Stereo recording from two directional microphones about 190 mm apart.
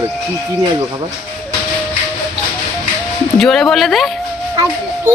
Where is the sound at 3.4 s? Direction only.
5° left (ahead or behind).